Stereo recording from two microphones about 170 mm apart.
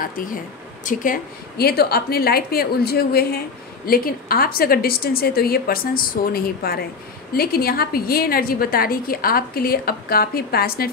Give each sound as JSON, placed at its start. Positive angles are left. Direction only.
{"t": 0.0, "sound": "a woman's voice", "side_deg": 55}